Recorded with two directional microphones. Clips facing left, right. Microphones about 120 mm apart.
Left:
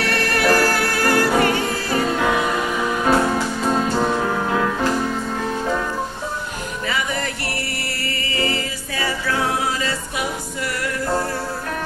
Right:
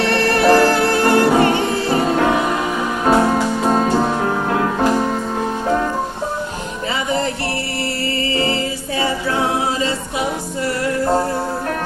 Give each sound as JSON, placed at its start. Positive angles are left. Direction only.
{"t": 0.0, "sound": "music", "side_deg": -25}
{"t": 8.4, "sound": "a capella", "side_deg": -25}